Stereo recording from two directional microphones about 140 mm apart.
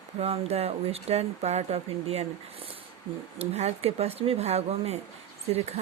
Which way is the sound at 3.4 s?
50° right (ahead or behind).